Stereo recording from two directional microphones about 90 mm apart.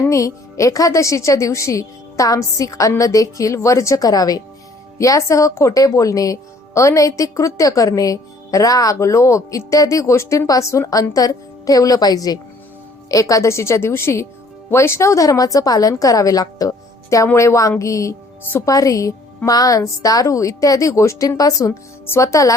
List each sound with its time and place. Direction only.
0.0 s a woman's voice: 35° left (ahead or behind)